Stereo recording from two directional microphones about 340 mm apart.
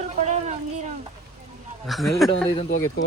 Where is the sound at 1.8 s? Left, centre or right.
Centre.